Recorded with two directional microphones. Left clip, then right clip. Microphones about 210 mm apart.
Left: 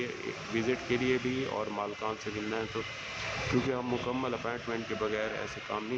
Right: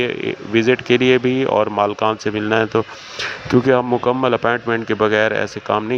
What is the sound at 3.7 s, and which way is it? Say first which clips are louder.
Speech: right 18 dB; 40° right (ahead or behind).